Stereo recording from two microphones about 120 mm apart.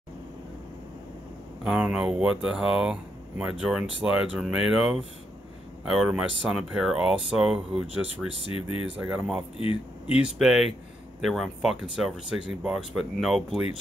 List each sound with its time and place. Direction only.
1.6 s speech: 10° right (ahead or behind)
8.5 s speech: 50° left (ahead or behind)
8.9 s speech: 5° right (ahead or behind)
9.6 s speech: 50° left (ahead or behind)
10.1 s speech: 5° right (ahead or behind)